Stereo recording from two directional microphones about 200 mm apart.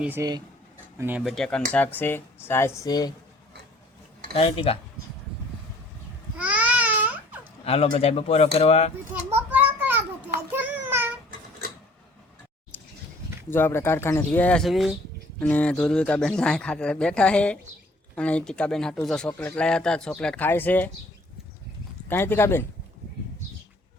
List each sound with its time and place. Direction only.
0.0 s speech: 15° right (ahead or behind)
1.2 s speech: centre (ahead or behind); by 3.1 s 20° left (ahead or behind)
4.3 s speech: 30° left (ahead or behind)
6.3 s babbling: 5° right (ahead or behind)
7.6 s speech: 30° left (ahead or behind)
9.3 s a sound: 10° right (ahead or behind)
10.5 s child singing: 10° right (ahead or behind)
12.7 s a sound: 10° left (ahead or behind)
13.5 s speech: 10° left (ahead or behind)
22.1 s speech: 10° left (ahead or behind)